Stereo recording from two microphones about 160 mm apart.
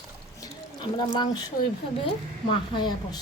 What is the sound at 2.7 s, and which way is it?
Speech, 30° left (ahead or behind).